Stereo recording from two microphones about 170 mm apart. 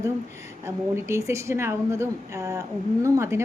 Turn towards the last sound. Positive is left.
turn(degrees=-15)  # may be behind; listen again after turning